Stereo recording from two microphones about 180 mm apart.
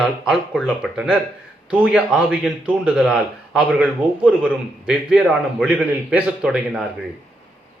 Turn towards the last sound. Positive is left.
turn(degrees=-5)  # may be behind; listen again after turning